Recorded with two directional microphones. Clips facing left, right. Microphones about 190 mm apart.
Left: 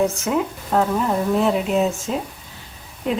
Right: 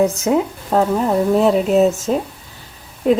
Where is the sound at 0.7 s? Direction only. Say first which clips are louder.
Right 4 dB; 35° right (ahead or behind).